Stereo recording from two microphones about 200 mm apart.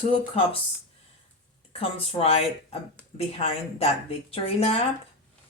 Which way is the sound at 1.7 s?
30° left (ahead or behind).